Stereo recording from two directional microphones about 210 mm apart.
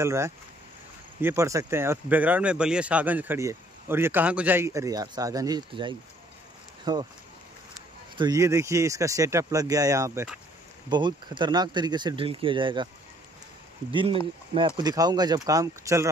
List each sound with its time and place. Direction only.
0.0 s speech: 15° right (ahead or behind)
8.2 s speech: 15° right (ahead or behind)
10.9 s speech: 20° right (ahead or behind)
14.8 s speech: 20° right (ahead or behind)